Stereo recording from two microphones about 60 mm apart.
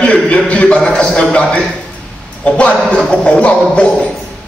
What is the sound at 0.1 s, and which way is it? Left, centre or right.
A man's voice, left.